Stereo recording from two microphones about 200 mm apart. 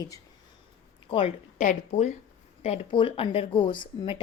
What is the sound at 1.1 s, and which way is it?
A woman's voice, 35° left (ahead or behind).